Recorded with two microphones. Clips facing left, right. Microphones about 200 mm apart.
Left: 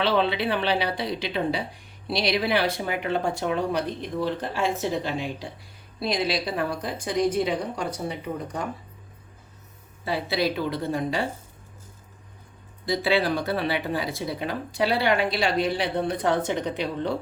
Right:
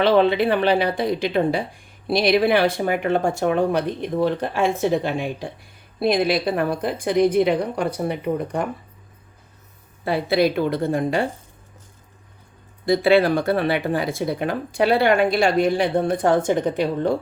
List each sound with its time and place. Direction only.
0.0 s a woman's voice: 50° right (ahead or behind)
10.0 s speech: 55° right (ahead or behind)
12.8 s speech: 55° right (ahead or behind)